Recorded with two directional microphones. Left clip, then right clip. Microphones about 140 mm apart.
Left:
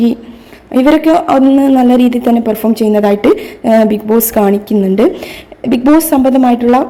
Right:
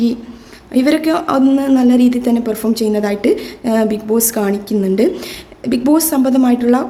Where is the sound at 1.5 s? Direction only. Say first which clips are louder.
Left 5 dB; 35° left (ahead or behind).